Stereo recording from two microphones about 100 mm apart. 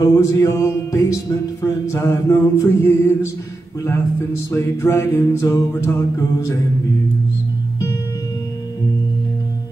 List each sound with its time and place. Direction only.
0.0 s music: 35° left (ahead or behind)
4.5 s mantra: 25° left (ahead or behind)